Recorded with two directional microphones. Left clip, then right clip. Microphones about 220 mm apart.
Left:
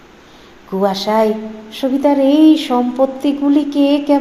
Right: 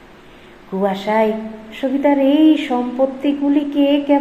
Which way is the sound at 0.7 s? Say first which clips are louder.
Left 3 dB; 35° left (ahead or behind).